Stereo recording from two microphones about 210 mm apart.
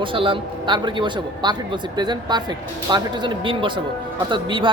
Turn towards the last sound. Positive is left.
turn(degrees=-25)  # may be behind; listen again after turning